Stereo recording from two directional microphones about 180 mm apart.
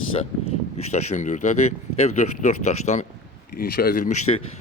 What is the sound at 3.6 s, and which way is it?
Speech, 55° left (ahead or behind).